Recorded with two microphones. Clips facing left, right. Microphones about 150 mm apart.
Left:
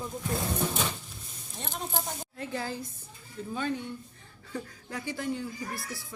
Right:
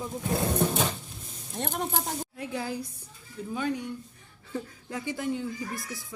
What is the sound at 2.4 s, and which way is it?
A woman's voice, 5° right (ahead or behind).